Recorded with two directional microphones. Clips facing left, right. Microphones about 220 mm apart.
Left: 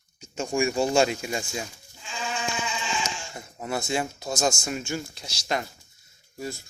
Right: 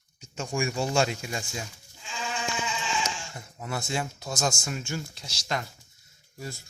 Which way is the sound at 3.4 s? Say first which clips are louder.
Left 4 dB; 20° left (ahead or behind).